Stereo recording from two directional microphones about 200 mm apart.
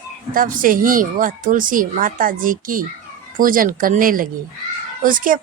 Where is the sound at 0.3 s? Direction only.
45° right (ahead or behind).